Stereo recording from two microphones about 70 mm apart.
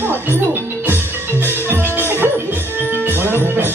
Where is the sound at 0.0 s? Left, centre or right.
Right.